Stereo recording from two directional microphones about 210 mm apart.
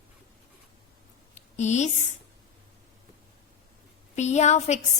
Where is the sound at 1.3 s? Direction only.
35° left (ahead or behind).